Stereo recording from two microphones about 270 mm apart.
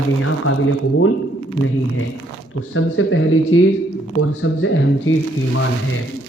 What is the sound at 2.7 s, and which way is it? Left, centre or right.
Speech, left.